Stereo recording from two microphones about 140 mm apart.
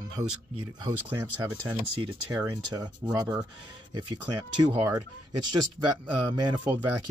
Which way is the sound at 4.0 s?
30° right (ahead or behind).